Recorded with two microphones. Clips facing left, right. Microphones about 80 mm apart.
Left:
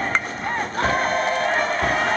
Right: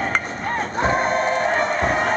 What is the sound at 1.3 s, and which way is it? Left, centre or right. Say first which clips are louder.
Music: right 1 dB; centre.